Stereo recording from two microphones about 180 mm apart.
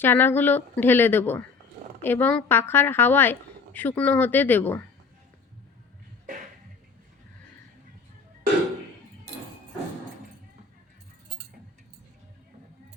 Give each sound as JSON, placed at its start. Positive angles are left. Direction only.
{"t": 0.0, "sound": "a woman's voice", "side_deg": 10}